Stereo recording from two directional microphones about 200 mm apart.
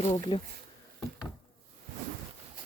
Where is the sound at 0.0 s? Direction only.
30° left (ahead or behind).